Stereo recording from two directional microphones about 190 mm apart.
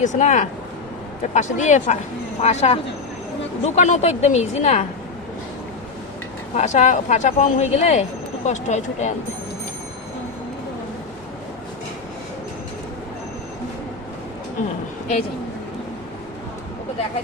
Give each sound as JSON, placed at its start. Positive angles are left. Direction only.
{"t": 0.0, "sound": "speech", "side_deg": 40}
{"t": 6.6, "sound": "speech", "side_deg": 35}